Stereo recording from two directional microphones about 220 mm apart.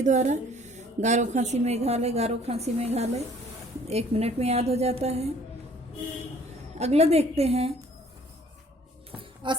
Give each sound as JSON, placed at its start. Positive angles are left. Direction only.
{"t": 0.0, "sound": "a woman's voice", "side_deg": -30}
{"t": 6.7, "sound": "a woman's voice", "side_deg": -30}
{"t": 9.1, "sound": "music", "side_deg": -20}